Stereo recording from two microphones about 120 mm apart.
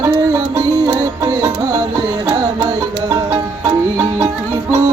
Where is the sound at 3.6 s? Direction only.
20° right (ahead or behind).